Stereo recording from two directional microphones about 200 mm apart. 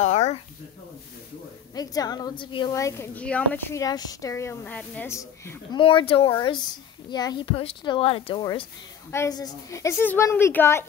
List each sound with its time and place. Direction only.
0.0 s a sound: 35° left (ahead or behind)
1.8 s a woman's voice: 20° left (ahead or behind)
5.8 s a child's voice: 25° left (ahead or behind); by 10.9 s 10° left (ahead or behind)